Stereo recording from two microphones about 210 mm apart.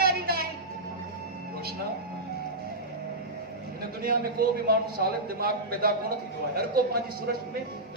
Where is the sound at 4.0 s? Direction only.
45° right (ahead or behind).